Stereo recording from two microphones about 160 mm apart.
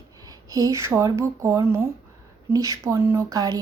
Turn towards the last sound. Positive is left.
turn(degrees=-20)  # may be behind; listen again after turning